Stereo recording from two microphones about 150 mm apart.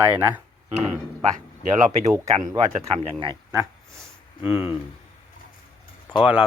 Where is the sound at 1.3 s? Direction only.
55° right (ahead or behind).